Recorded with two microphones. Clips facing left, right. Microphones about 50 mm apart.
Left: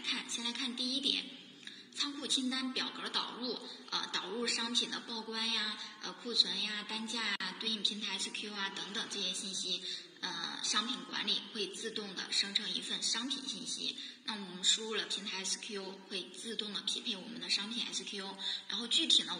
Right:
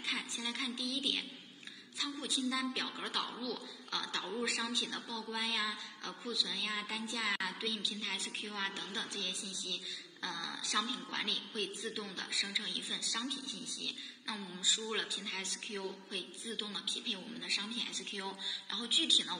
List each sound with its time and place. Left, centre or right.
0.7 s speech: right
2.0 s music: centre
4.5 s speech: centre
5.3 s music: centre